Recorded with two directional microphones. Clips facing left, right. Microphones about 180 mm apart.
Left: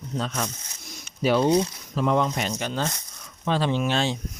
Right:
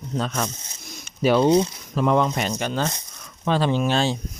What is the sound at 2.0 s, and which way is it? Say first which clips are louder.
Speech: right 3 dB; 65° right (ahead or behind).